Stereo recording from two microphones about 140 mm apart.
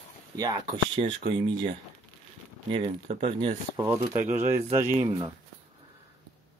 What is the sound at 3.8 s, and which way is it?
Speech, 20° right (ahead or behind).